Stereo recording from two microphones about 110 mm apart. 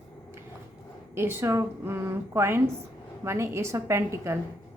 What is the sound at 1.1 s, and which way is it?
A woman's voice, 20° right (ahead or behind).